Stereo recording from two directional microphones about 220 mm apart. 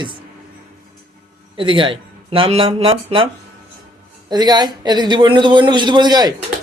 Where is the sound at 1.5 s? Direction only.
20° right (ahead or behind).